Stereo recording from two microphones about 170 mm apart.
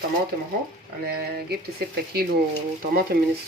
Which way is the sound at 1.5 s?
65° right (ahead or behind).